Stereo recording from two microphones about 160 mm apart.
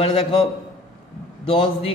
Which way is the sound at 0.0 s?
35° left (ahead or behind).